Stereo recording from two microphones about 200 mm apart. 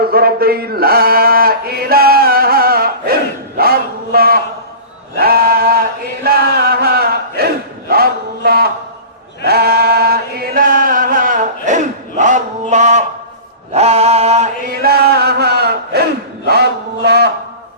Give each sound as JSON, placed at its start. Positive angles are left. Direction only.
{"t": 0.0, "sound": "a sound", "side_deg": -50}
{"t": 6.2, "sound": "chant", "side_deg": -50}
{"t": 8.4, "sound": "music", "side_deg": -50}
{"t": 9.4, "sound": "chant", "side_deg": -50}
{"t": 13.7, "sound": "mantra", "side_deg": -30}
{"t": 14.8, "sound": "chant", "side_deg": -50}
{"t": 16.5, "sound": "a sound", "side_deg": -55}